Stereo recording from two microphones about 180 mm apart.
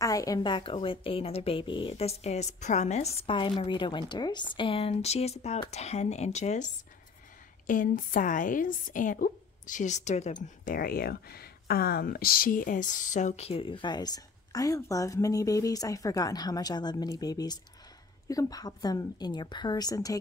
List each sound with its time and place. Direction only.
0.0 s a woman's voice: 20° left (ahead or behind); by 10.3 s 40° left (ahead or behind)
10.6 s speech: 55° left (ahead or behind); by 20.2 s 20° left (ahead or behind)